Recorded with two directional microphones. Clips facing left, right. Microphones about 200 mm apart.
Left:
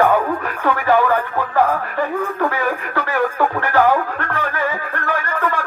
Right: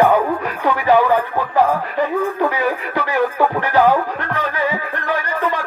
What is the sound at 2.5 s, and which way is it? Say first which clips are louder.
Music: right 1 dB; 15° right (ahead or behind).